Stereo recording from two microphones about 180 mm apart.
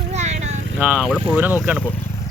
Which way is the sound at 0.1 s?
40° right (ahead or behind).